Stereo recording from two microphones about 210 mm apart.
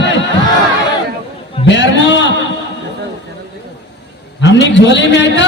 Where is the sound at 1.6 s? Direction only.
60° left (ahead or behind).